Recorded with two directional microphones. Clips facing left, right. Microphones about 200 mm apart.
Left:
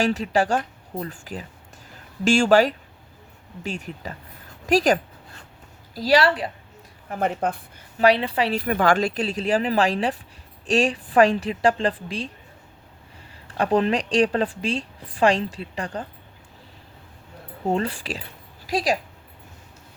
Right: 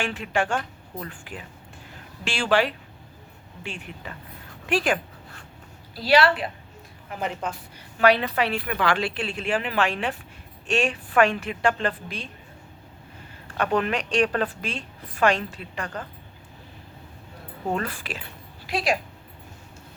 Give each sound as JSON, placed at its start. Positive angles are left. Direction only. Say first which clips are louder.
{"t": 0.0, "sound": "a woman's voice", "louder": "left 5 dB", "side_deg": 40}
{"t": 7.1, "sound": "speech", "louder": "left 6 dB", "side_deg": 50}
{"t": 7.9, "sound": "a woman's voice", "louder": "left 1 dB", "side_deg": 30}
{"t": 13.6, "sound": "a woman's voice", "louder": "left 4 dB", "side_deg": 30}
{"t": 17.7, "sound": "a woman's voice", "louder": "left 4 dB", "side_deg": 30}